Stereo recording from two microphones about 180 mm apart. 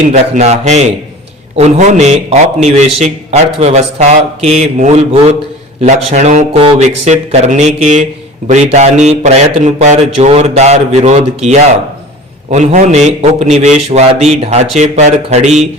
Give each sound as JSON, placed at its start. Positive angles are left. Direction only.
{"t": 0.1, "sound": "a man's voice", "side_deg": -35}
{"t": 12.5, "sound": "a man's voice", "side_deg": -40}